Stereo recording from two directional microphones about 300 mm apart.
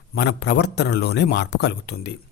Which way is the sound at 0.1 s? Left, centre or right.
Left.